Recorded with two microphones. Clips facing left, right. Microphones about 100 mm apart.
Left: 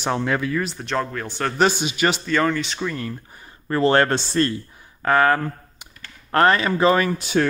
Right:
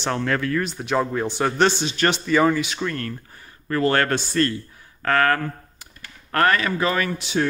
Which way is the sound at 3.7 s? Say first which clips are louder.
Left 3 dB; 25° left (ahead or behind).